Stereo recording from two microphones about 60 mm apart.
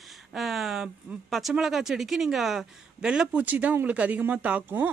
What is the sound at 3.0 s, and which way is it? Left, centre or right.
Speech, centre.